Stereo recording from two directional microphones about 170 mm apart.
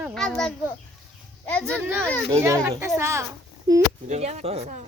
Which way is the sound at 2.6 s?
15° right (ahead or behind).